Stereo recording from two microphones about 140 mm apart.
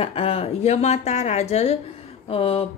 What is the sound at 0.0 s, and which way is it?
A woman's voice, 45° left (ahead or behind).